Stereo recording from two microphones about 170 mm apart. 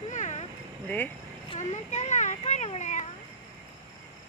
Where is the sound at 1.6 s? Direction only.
45° left (ahead or behind).